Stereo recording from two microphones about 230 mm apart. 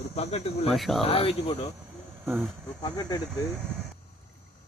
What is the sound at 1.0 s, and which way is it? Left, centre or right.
Speech, left.